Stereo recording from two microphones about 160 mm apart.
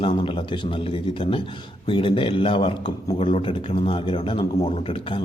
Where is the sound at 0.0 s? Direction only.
35° left (ahead or behind).